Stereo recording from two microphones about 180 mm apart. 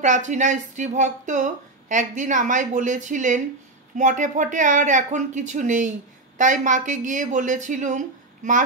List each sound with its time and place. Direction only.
0.0 s speech: 45° right (ahead or behind)